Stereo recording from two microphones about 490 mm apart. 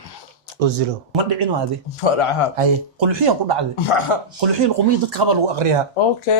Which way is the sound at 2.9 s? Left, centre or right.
Right.